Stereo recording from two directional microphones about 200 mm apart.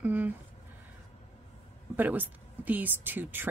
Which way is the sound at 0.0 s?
10° right (ahead or behind).